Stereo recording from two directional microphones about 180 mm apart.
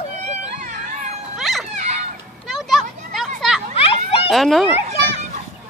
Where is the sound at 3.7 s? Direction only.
30° left (ahead or behind).